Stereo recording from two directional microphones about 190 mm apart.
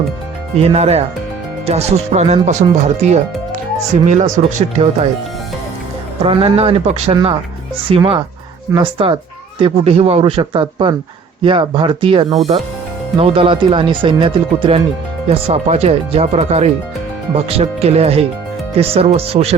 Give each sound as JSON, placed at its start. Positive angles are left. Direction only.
{"t": 0.6, "sound": "speech", "side_deg": -35}
{"t": 6.2, "sound": "speech", "side_deg": -30}